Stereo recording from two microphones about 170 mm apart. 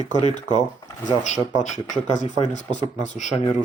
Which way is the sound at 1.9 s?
45° left (ahead or behind).